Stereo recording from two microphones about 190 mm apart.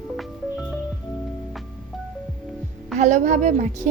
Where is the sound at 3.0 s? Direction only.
40° right (ahead or behind).